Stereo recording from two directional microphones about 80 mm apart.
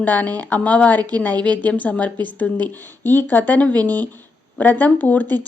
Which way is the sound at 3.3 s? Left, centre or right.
Left.